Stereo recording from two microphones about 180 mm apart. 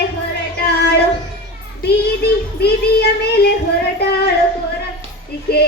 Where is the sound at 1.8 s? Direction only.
60° left (ahead or behind).